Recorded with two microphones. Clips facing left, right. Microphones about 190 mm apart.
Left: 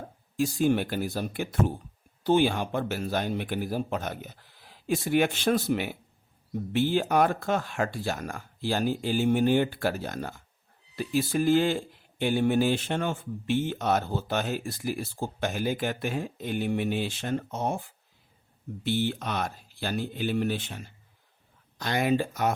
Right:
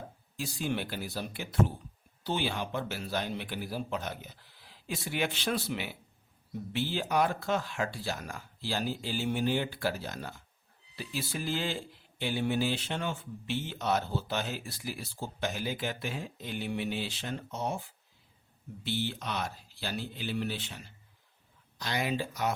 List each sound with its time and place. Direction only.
0.3 s speech: 50° left (ahead or behind)